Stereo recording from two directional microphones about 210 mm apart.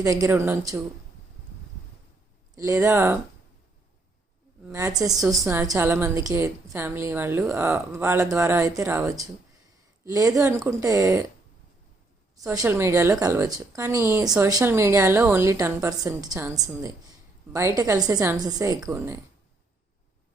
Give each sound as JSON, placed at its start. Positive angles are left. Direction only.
{"t": 0.0, "sound": "a woman's voice", "side_deg": -15}
{"t": 2.6, "sound": "a woman's voice", "side_deg": -15}
{"t": 4.7, "sound": "a woman's voice", "side_deg": -15}
{"t": 12.4, "sound": "a woman's voice", "side_deg": -15}